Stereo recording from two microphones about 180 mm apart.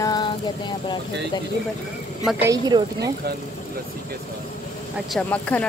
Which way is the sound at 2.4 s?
20° right (ahead or behind).